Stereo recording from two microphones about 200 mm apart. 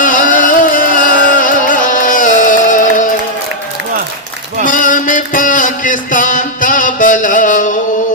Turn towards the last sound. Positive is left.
turn(degrees=40)  # may be behind; listen again after turning